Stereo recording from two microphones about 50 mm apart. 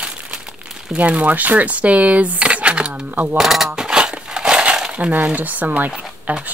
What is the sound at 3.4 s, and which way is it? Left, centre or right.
Crumpling, centre.